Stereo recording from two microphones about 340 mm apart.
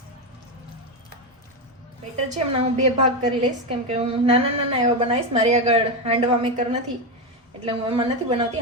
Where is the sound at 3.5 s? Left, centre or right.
Centre.